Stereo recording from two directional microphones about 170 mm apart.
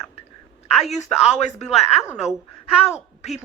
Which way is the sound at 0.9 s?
40° left (ahead or behind).